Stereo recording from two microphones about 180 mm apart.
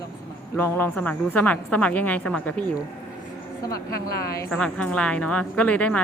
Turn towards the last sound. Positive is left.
turn(degrees=10)  # may be behind; listen again after turning